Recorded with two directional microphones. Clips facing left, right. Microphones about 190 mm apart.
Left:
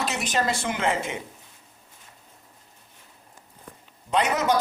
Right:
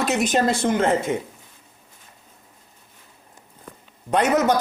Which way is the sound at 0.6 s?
45° right (ahead or behind).